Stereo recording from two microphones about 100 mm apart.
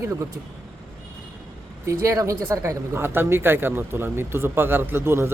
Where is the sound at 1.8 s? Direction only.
30° right (ahead or behind).